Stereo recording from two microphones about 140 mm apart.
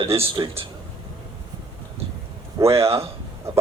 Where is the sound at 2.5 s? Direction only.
20° right (ahead or behind).